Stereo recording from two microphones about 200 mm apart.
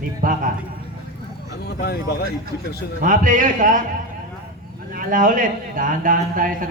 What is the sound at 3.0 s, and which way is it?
Speech, 40° right (ahead or behind).